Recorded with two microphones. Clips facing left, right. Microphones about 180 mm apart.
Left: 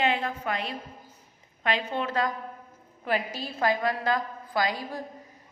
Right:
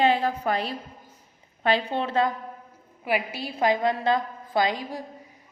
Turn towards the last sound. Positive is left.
turn(degrees=-20)  # may be behind; listen again after turning